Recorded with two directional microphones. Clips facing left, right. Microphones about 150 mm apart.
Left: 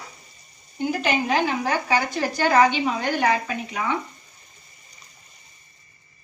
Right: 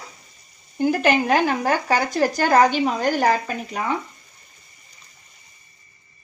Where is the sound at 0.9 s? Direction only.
50° right (ahead or behind).